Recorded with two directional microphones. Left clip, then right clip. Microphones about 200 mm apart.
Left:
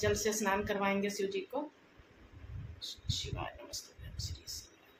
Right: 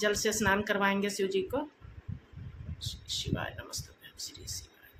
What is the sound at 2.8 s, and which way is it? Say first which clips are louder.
Speech: right 3 dB; 35° right (ahead or behind).